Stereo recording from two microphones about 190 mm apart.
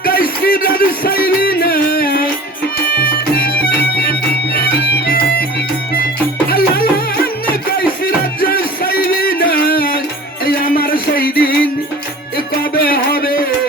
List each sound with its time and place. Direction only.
0.0 s music: 50° left (ahead or behind)
6.5 s music: 55° left (ahead or behind)
8.4 s music: 50° left (ahead or behind)